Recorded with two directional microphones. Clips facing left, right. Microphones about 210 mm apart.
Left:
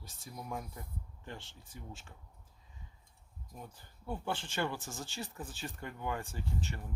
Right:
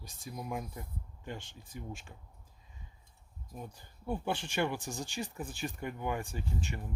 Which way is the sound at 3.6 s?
15° right (ahead or behind).